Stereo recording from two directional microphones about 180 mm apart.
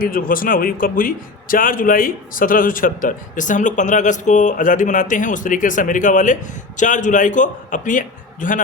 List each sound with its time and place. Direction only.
0.0 s a man's voice: 50° left (ahead or behind)